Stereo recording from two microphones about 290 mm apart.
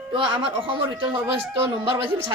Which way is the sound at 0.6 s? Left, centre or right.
Centre.